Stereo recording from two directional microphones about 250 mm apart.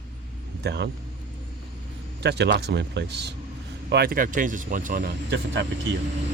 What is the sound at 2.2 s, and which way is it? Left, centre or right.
Speech, right.